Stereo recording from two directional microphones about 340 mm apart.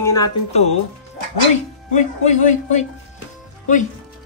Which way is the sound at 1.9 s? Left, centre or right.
Left.